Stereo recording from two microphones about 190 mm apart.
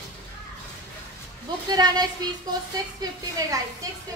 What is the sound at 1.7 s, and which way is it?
Speech, 20° right (ahead or behind).